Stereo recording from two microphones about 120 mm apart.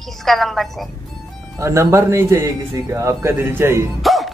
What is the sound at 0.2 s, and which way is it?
Speech, centre (ahead or behind).